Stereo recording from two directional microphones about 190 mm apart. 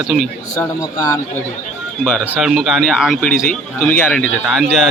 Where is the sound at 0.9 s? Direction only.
20° left (ahead or behind).